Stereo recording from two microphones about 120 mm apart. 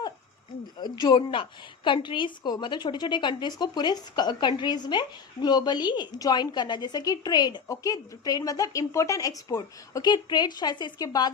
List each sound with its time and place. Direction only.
0.8 s a woman's voice: 35° left (ahead or behind)